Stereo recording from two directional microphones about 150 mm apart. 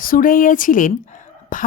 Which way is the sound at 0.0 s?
70° left (ahead or behind).